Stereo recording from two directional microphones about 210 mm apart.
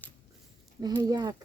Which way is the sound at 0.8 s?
20° right (ahead or behind).